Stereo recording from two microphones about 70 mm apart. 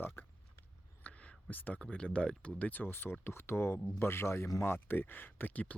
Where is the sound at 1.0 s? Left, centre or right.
Centre.